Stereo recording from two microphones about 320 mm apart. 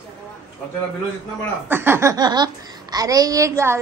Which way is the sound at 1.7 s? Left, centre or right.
Centre.